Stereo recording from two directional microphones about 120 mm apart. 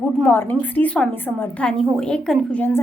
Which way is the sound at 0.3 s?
15° left (ahead or behind).